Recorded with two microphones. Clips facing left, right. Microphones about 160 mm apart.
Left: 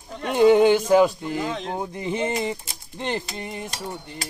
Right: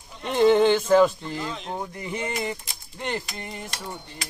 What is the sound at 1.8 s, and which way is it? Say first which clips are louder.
Speech: left 5 dB; 25° left (ahead or behind).